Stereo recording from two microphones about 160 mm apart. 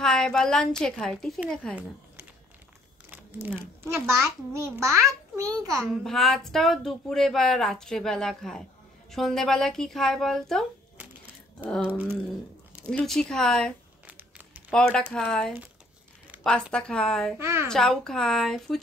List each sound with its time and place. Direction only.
0.0 s speech: 5° left (ahead or behind)
3.1 s a child's voice: 10° right (ahead or behind)
6.0 s speech: centre (ahead or behind)
11.9 s speech: 10° right (ahead or behind)
12.9 s speech: 5° left (ahead or behind)
14.0 s crumpling: 10° right (ahead or behind)
14.7 s speech: 5° left (ahead or behind)
16.7 s speech: 5° left (ahead or behind)
17.4 s speech: 15° right (ahead or behind)
17.6 s speech: 5° left (ahead or behind)